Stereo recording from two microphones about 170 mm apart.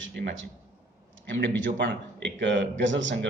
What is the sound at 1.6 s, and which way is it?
A man's voice, 90° right.